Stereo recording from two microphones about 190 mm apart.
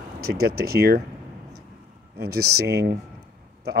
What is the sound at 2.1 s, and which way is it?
Speech, 55° right (ahead or behind).